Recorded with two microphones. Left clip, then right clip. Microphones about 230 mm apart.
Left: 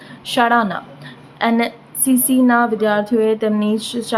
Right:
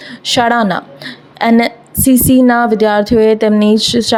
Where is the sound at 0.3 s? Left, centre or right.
Right.